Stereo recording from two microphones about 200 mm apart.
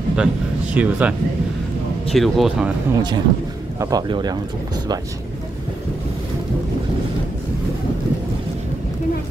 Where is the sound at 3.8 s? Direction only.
20° right (ahead or behind).